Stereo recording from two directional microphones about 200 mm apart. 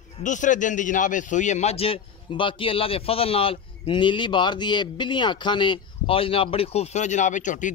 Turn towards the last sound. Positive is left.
turn(degrees=40)  # may be behind; listen again after turning